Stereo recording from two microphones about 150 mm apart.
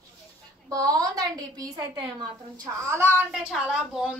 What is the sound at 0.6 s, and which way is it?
A woman's voice, 25° right (ahead or behind).